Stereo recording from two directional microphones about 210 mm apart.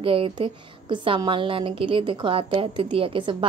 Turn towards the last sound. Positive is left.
turn(degrees=-25)  # may be behind; listen again after turning